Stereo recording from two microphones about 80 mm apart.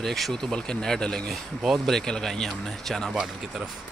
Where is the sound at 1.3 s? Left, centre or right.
Centre.